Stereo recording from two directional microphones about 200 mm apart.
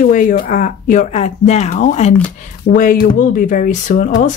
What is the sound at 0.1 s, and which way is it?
Speech, 40° left (ahead or behind).